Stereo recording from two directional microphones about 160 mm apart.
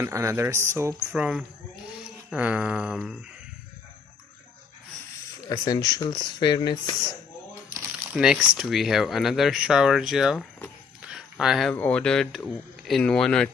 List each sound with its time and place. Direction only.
0.0 s speech: 15° right (ahead or behind)
1.1 s speech: 5° right (ahead or behind)
5.5 s speech: 25° left (ahead or behind)
8.1 s speech: 5° right (ahead or behind)
11.0 s a sound: 5° right (ahead or behind)
11.7 s speech: 10° left (ahead or behind)